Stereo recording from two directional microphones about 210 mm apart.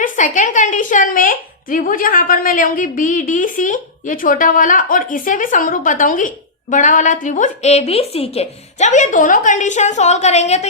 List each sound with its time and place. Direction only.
0.0 s a woman's voice: 40° left (ahead or behind)